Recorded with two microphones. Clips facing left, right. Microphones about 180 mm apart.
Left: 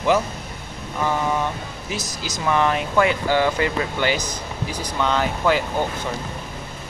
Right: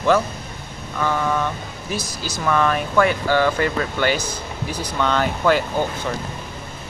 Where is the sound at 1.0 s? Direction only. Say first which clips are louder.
Right 1 dB; 15° left (ahead or behind).